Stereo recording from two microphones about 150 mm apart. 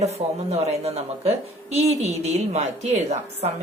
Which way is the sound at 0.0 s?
45° right (ahead or behind).